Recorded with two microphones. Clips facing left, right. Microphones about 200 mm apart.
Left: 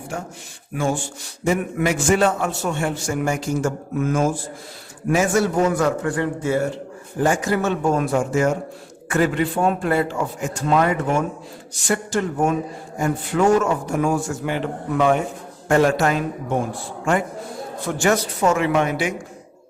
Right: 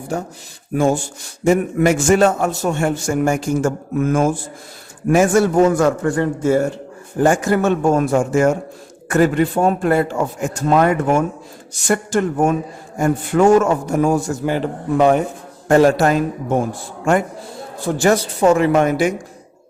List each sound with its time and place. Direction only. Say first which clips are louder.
0.7 s a man's voice: right 6 dB; 40° right (ahead or behind)
17.7 s a man's voice: right 4 dB; 35° right (ahead or behind)